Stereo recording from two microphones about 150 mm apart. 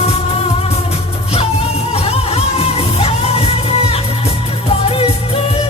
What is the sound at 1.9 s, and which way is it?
Music, 40° left (ahead or behind).